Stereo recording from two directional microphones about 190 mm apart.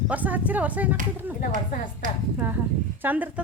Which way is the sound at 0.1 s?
10° right (ahead or behind).